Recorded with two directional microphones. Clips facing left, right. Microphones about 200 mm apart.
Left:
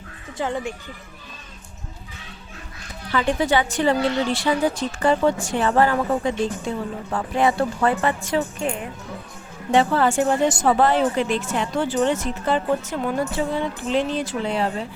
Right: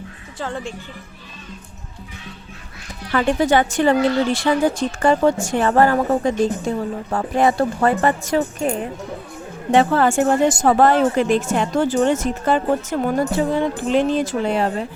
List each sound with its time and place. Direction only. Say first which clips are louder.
0.3 s speech: left 2 dB; 15° left (ahead or behind)
3.1 s a woman's voice: right 4 dB; 50° right (ahead or behind)
9.7 s a woman's voice: right 3 dB; 50° right (ahead or behind)